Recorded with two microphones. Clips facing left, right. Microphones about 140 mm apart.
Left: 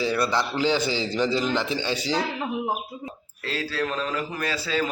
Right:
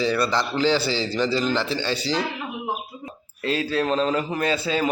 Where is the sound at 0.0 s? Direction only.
5° left (ahead or behind).